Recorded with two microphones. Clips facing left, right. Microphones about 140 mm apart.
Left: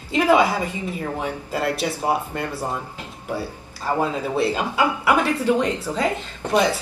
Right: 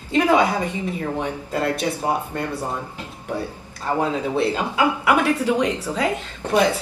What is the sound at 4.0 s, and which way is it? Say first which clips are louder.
Speech: right 1 dB; 5° left (ahead or behind).